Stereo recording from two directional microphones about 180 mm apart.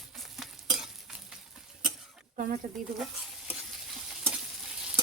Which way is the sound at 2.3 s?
50° right (ahead or behind).